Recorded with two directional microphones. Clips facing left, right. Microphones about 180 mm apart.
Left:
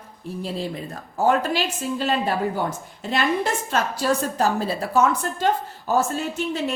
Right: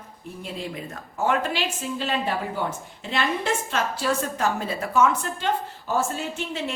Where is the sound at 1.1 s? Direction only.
35° left (ahead or behind).